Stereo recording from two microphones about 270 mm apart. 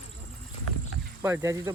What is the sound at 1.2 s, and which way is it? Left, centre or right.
Speech, centre.